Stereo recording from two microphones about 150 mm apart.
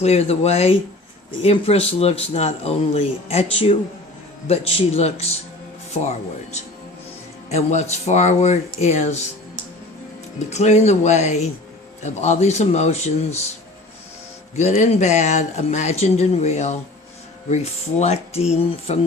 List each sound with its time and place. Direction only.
0.0 s speech: 45° left (ahead or behind)
10.5 s speech: 50° left (ahead or behind)
14.5 s speech: 50° left (ahead or behind)
18.0 s speech: 45° left (ahead or behind)